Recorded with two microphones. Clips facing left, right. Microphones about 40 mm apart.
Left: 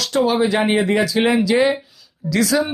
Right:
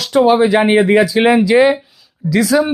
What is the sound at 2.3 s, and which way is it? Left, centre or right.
Speech, centre.